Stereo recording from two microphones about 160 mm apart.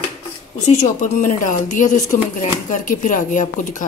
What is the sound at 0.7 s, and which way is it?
Speech, 45° left (ahead or behind).